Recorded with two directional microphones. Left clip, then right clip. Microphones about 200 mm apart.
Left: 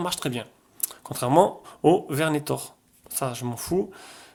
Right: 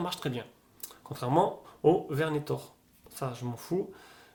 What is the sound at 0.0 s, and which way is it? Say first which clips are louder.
Speech: left 6 dB; 30° left (ahead or behind).